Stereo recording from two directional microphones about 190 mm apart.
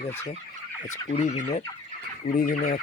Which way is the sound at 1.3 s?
40° left (ahead or behind).